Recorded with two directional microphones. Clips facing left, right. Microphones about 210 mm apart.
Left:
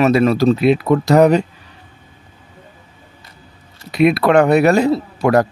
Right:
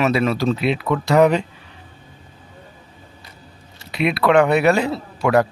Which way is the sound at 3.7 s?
45° left (ahead or behind).